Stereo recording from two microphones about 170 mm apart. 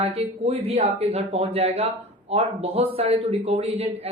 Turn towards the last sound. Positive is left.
turn(degrees=-35)  # may be behind; listen again after turning